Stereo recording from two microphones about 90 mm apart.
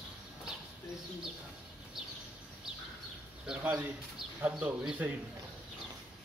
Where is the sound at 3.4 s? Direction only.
10° right (ahead or behind).